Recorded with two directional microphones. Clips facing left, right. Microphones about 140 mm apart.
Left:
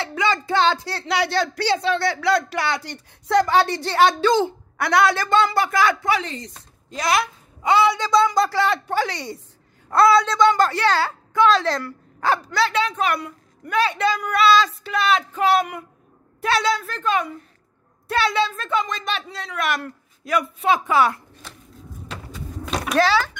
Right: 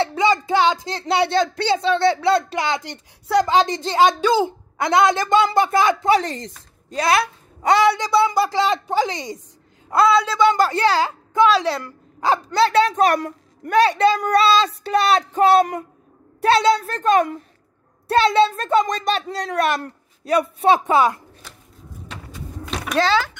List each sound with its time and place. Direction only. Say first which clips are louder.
0.0 s music: right 5 dB; 30° right (ahead or behind)
0.3 s speech: right 2 dB; 15° right (ahead or behind)
1.0 s speech: right 4 dB; 25° right (ahead or behind)
6.2 s speech: right 4 dB; 45° right (ahead or behind)
7.6 s a woman's voice: right 2 dB; 70° right (ahead or behind)
8.0 s speech: even; 10° right (ahead or behind)
8.5 s speech: right 1 dB; 20° right (ahead or behind)
9.9 s a woman's voice: left 1 dB; 5° right (ahead or behind)
10.5 s speech: right 1 dB; 20° right (ahead or behind)
12.6 s a woman's voice: right 7 dB; 35° right (ahead or behind)
19.7 s speech: right 2 dB; 30° right (ahead or behind)
22.9 s speech: even; 20° right (ahead or behind)